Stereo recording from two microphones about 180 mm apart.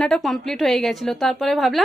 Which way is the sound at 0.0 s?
Centre (ahead or behind).